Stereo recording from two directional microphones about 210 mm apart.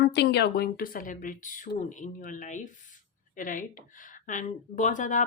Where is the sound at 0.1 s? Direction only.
55° left (ahead or behind).